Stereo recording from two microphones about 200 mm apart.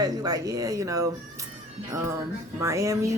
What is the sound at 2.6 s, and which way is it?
Speech, 15° right (ahead or behind).